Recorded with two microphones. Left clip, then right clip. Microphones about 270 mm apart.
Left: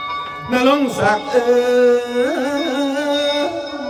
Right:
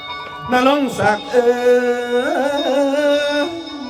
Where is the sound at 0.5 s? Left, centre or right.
Centre.